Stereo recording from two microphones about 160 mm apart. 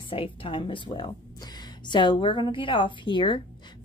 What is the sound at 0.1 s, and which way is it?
Speech, 35° left (ahead or behind).